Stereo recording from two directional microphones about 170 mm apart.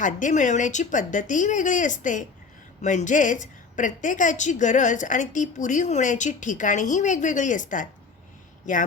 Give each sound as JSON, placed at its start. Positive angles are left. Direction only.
{"t": 0.0, "sound": "a woman's voice", "side_deg": 50}